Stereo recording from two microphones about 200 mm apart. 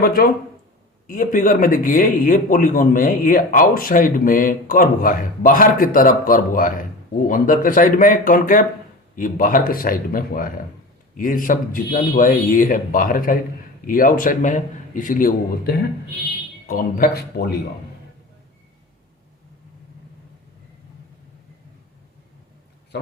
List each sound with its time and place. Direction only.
0.0 s a man's voice: 45° left (ahead or behind)